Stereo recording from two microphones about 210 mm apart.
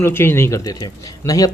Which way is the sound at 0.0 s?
10° left (ahead or behind).